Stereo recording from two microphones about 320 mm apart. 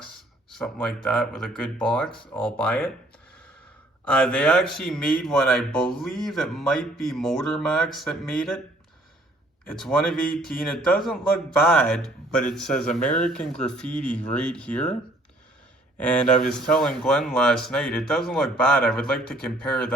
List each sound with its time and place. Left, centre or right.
0.5 s speech: centre
4.0 s speech: centre
10.3 s speech: centre
12.7 s speech: left
13.2 s speech: centre
16.1 s speech: left
16.5 s speech: centre